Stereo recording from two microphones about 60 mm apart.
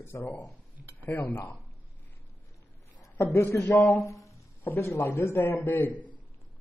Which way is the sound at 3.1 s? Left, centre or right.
Left.